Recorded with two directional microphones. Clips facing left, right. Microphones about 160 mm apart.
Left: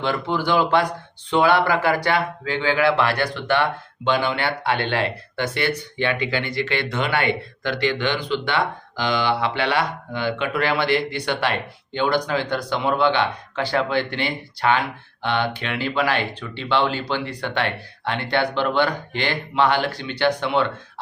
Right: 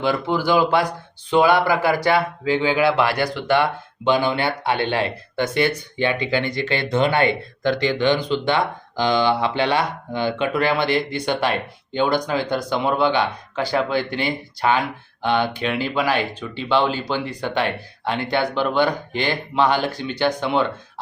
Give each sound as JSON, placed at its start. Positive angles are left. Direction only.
{"t": 0.0, "sound": "speech", "side_deg": -10}